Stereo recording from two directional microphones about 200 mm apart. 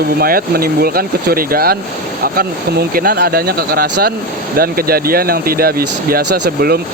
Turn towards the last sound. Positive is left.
turn(degrees=-50)  # may be behind; listen again after turning